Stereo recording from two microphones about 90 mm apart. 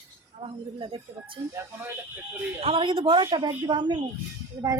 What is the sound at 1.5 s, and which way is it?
Speech, 30° right (ahead or behind).